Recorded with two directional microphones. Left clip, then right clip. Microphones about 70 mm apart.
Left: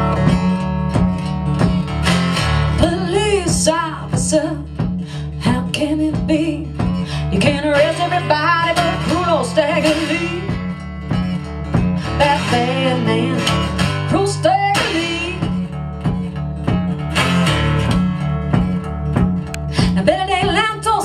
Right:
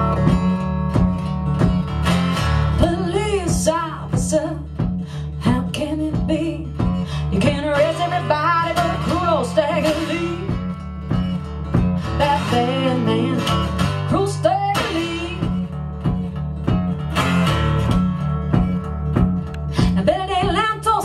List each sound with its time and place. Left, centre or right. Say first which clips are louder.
0.0 s music: left 2 dB; left
16.6 s music: left 2 dB; left
19.8 s music: left 3 dB; left